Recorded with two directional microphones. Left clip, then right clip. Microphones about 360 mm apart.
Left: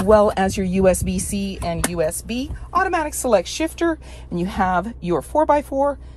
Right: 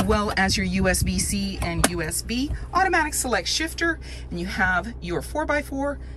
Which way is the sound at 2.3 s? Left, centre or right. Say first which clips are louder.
Left 2 dB; centre.